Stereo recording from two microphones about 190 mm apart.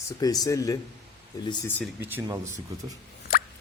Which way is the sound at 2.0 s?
10° right (ahead or behind).